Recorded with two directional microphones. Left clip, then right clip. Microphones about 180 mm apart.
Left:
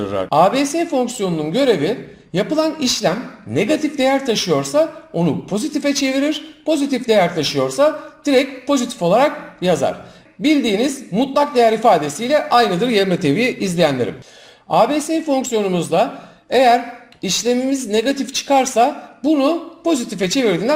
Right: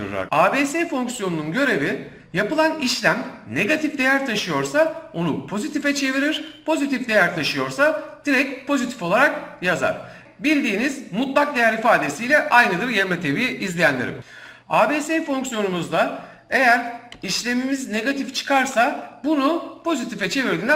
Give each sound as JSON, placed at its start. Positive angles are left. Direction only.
{"t": 0.0, "sound": "speech", "side_deg": 25}